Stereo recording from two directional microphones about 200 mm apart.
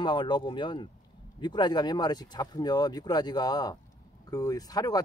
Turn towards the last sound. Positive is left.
turn(degrees=20)  # may be behind; listen again after turning